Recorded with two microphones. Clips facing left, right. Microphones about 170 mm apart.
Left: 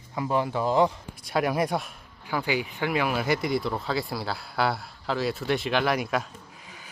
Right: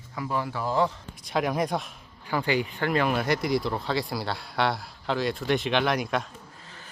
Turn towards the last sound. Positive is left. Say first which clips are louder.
# even
turn(degrees=10)  # may be behind; listen again after turning